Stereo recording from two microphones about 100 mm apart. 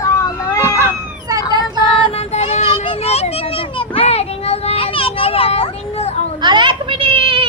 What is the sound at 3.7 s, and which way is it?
Children playing, 70° left (ahead or behind).